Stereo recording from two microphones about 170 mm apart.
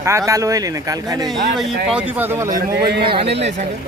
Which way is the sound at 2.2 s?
15° right (ahead or behind).